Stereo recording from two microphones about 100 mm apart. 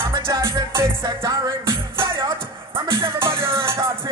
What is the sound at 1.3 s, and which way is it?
Music, 55° right (ahead or behind).